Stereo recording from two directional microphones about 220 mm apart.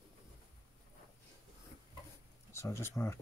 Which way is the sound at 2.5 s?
15° left (ahead or behind).